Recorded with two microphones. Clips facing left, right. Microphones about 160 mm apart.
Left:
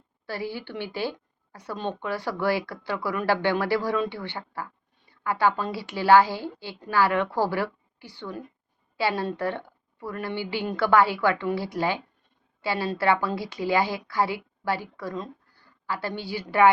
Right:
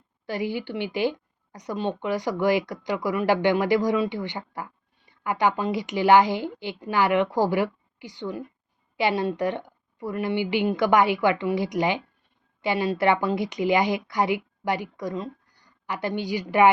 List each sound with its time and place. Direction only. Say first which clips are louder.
0.3 s speech: right 4 dB; 15° right (ahead or behind)